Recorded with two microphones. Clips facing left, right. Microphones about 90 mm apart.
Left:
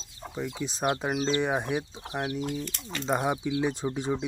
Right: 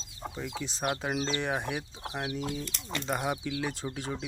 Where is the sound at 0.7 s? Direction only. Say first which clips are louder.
Left 3 dB; 20° left (ahead or behind).